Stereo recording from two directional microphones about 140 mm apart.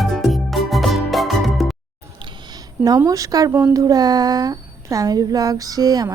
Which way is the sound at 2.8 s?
25° right (ahead or behind).